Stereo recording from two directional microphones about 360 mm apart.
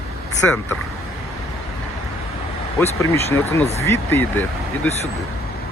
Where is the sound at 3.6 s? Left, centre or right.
Centre.